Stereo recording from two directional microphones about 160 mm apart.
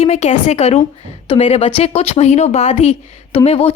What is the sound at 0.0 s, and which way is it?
Speech, 45° left (ahead or behind).